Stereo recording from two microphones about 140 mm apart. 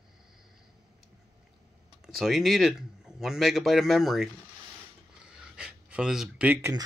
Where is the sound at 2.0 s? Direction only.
Centre (ahead or behind).